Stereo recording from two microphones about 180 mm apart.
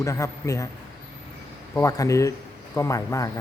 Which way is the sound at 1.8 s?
15° left (ahead or behind).